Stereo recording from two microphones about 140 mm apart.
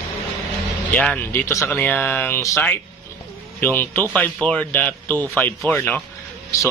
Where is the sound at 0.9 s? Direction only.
10° left (ahead or behind).